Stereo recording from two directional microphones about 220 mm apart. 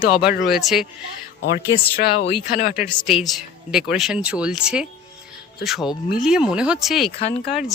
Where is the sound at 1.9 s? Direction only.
45° left (ahead or behind).